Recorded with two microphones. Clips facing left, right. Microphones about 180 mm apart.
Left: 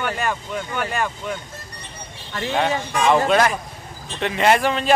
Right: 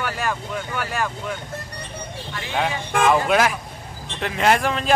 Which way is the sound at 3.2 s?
5° right (ahead or behind).